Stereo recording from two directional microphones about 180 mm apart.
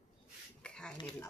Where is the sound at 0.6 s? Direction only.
5° left (ahead or behind).